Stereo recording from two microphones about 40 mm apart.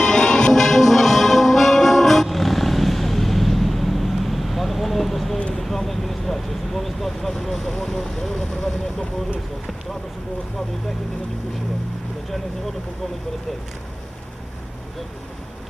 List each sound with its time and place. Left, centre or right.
0.0 s music: centre
0.5 s music: centre
5.5 s vehicle: centre